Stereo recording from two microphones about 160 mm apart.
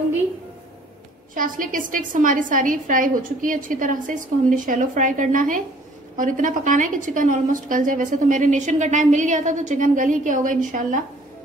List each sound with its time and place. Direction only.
1.3 s a woman's voice: 60° right (ahead or behind)